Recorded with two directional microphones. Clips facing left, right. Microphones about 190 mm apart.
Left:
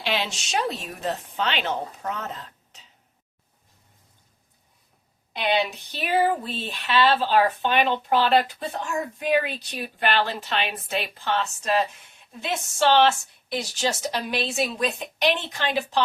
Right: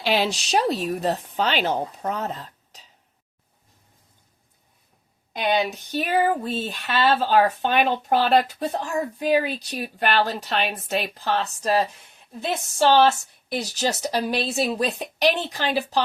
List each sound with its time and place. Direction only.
0.0 s speech: 40° right (ahead or behind)
5.3 s speech: 45° right (ahead or behind)